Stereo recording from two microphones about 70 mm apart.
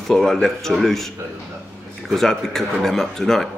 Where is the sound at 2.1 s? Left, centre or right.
Centre.